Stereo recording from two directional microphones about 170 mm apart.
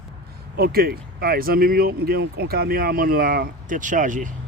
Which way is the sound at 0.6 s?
65° right (ahead or behind).